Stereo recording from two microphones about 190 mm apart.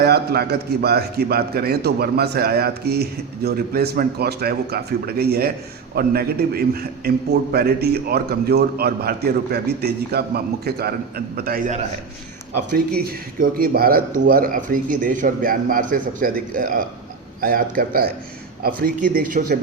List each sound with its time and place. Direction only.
0.0 s a man's voice: 55° right (ahead or behind)
12.7 s speech: 55° right (ahead or behind)